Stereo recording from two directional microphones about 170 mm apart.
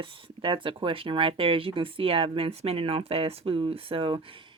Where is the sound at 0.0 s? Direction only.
30° right (ahead or behind).